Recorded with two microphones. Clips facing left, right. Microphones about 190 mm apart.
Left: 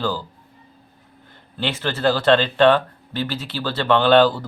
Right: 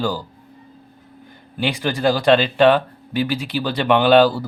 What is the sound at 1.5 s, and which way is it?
Speech, 15° right (ahead or behind).